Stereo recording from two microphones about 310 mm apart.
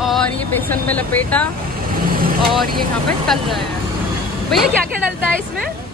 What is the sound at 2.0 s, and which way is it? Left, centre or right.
Vehicle, right.